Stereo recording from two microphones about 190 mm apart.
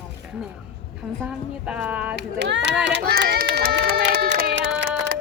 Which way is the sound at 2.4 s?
65° right (ahead or behind).